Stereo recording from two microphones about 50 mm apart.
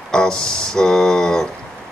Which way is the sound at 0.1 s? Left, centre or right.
Centre.